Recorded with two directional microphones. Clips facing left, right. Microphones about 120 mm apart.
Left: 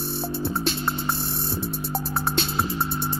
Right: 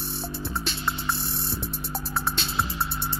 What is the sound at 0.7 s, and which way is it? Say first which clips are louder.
Hum: left 4 dB; 45° left (ahead or behind).